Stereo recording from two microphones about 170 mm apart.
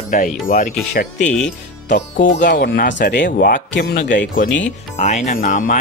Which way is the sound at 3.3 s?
55° left (ahead or behind).